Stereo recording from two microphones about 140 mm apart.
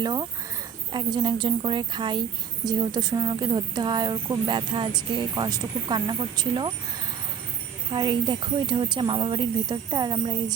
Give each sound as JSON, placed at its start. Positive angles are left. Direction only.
{"t": 0.0, "sound": "speech", "side_deg": -30}
{"t": 7.9, "sound": "speech", "side_deg": -35}